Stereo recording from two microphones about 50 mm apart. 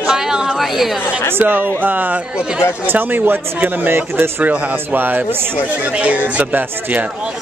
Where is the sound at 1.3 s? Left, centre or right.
Right.